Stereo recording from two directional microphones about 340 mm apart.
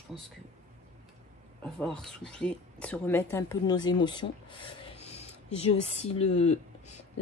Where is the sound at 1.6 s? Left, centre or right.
Centre.